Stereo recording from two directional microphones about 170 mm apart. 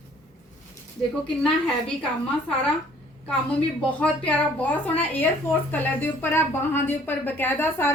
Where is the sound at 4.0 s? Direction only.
10° left (ahead or behind).